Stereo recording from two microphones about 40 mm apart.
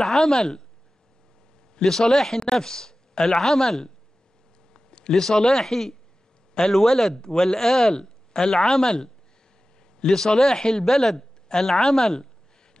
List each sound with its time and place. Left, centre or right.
0.0 s speech: centre
1.8 s a woman's voice: centre
4.7 s a sound: left
5.1 s speech: centre
11.1 s a sound: centre
11.7 s speech: centre